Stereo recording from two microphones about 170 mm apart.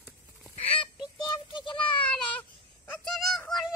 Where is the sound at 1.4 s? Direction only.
30° left (ahead or behind).